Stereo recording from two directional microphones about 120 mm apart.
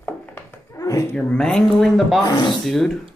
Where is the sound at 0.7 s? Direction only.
30° left (ahead or behind).